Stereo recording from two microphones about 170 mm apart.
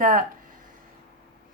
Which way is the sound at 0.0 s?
55° right (ahead or behind).